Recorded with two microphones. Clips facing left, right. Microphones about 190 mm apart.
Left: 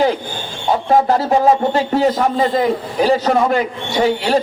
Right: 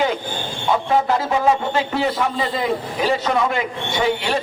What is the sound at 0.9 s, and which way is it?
A man's voice, 40° left (ahead or behind).